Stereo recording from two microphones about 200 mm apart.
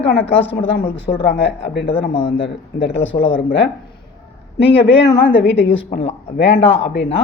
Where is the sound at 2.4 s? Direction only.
65° left (ahead or behind).